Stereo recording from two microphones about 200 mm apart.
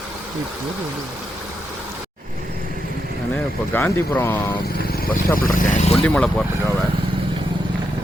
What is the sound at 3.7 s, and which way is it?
Speech, 10° left (ahead or behind).